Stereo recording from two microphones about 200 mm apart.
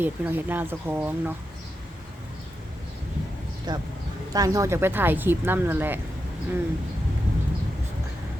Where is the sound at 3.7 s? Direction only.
20° right (ahead or behind).